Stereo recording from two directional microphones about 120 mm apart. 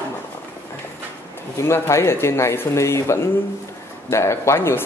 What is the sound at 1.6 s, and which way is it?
Speech, 25° left (ahead or behind).